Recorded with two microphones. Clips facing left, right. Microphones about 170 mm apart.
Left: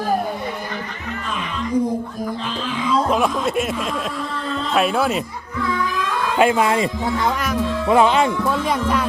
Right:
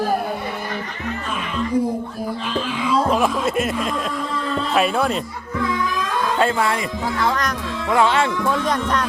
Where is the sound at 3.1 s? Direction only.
Centre (ahead or behind).